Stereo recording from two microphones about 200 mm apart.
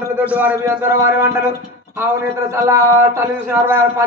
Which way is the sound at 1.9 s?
15° right (ahead or behind).